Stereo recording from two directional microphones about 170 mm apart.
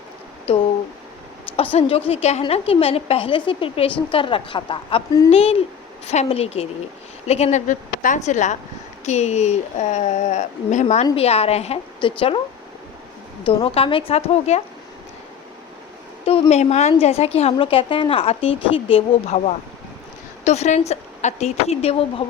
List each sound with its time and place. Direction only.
0.5 s a woman's voice: 35° left (ahead or behind)
13.4 s a woman's voice: 35° left (ahead or behind)
16.2 s a woman's voice: 35° left (ahead or behind)